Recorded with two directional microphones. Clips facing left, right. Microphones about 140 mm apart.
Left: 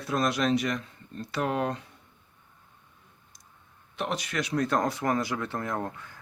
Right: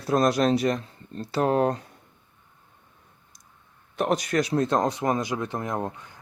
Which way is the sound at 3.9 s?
45° right (ahead or behind).